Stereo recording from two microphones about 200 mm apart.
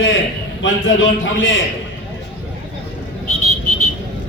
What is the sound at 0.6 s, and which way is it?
A man's voice, 70° left (ahead or behind).